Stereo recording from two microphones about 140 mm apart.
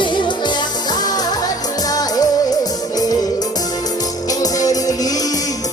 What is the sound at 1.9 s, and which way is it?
Music, 25° left (ahead or behind).